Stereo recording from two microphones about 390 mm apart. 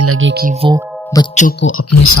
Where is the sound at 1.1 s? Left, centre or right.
Centre.